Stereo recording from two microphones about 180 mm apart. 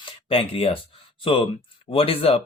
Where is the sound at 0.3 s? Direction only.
30° left (ahead or behind).